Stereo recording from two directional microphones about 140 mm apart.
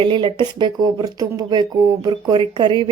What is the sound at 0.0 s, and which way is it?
A woman's voice, 35° right (ahead or behind).